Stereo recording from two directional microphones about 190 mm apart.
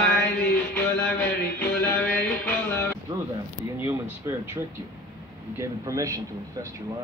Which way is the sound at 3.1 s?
20° right (ahead or behind).